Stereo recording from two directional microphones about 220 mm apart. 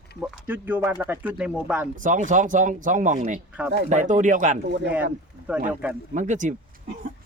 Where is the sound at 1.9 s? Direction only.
35° right (ahead or behind).